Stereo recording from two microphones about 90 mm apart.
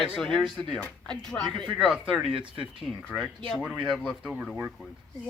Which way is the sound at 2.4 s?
70° right (ahead or behind).